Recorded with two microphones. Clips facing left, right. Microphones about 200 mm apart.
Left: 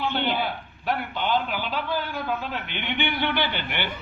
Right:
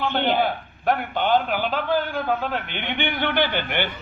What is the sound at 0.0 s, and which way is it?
A man's voice, 50° right (ahead or behind).